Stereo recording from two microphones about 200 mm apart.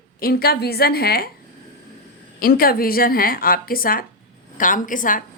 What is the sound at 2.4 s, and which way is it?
A woman's voice, 45° left (ahead or behind).